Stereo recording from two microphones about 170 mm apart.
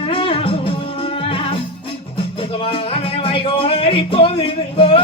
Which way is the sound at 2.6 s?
35° left (ahead or behind).